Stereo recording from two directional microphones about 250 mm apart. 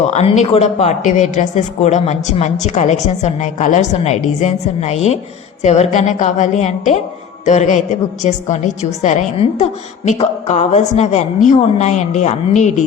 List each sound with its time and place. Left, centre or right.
0.1 s a woman's voice: left